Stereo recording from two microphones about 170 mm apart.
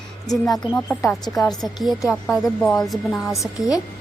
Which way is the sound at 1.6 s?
Centre (ahead or behind).